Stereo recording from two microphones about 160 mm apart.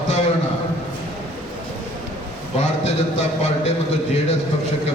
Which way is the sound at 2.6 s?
40° left (ahead or behind).